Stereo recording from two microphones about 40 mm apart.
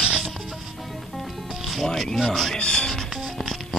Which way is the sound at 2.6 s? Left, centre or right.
Left.